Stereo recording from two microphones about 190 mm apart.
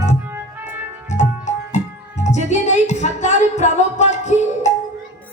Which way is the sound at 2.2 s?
40° left (ahead or behind).